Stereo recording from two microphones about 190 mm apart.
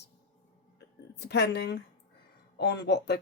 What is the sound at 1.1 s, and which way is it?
Speech, 60° left (ahead or behind).